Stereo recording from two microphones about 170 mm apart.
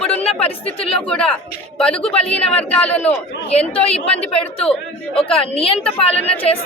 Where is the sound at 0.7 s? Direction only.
35° left (ahead or behind).